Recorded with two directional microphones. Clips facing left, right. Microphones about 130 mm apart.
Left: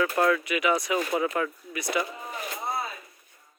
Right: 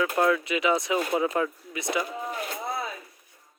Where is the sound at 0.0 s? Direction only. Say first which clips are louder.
Even; 15° right (ahead or behind).